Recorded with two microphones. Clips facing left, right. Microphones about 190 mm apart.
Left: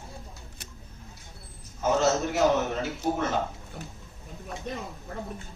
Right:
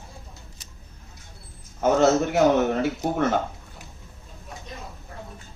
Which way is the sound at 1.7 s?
60° right (ahead or behind).